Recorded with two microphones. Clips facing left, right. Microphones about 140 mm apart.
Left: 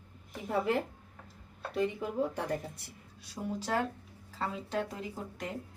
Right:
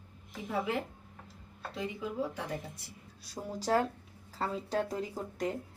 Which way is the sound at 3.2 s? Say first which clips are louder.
Right 2 dB; 40° right (ahead or behind).